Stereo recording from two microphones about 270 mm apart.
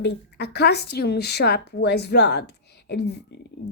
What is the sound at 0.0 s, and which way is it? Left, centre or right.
Speech, left.